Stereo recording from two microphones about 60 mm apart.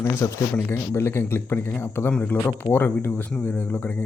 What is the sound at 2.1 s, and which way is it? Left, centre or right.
Speech, left.